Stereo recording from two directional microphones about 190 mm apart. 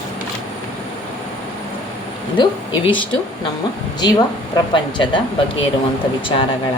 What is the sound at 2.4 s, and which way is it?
Speech, 25° left (ahead or behind).